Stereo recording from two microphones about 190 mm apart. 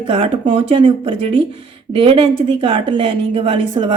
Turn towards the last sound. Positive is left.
turn(degrees=-30)  # may be behind; listen again after turning